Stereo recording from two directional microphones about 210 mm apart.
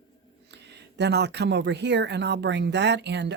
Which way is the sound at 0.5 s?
55° right (ahead or behind).